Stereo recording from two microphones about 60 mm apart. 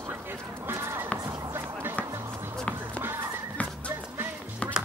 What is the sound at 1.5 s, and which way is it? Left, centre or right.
Music, right.